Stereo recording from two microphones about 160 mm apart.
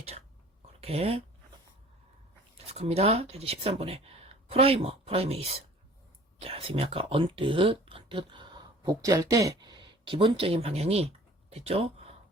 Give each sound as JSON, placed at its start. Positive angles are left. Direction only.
{"t": 0.8, "sound": "speech", "side_deg": -40}
{"t": 2.6, "sound": "speech", "side_deg": -40}